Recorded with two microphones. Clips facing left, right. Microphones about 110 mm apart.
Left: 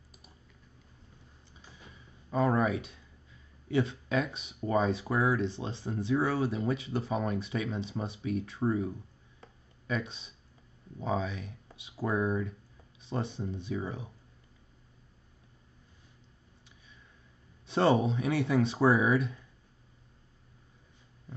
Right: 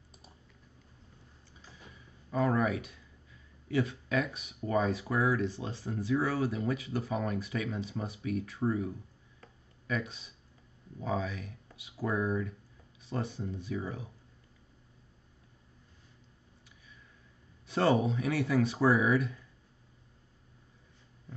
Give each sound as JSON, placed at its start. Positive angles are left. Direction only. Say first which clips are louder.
{"t": 2.3, "sound": "speech", "louder": "left 2 dB", "side_deg": 25}
{"t": 9.4, "sound": "a sound", "louder": "left 2 dB", "side_deg": 25}
{"t": 11.0, "sound": "speech", "louder": "left 2 dB", "side_deg": 25}
{"t": 17.6, "sound": "speech", "louder": "left 2 dB", "side_deg": 25}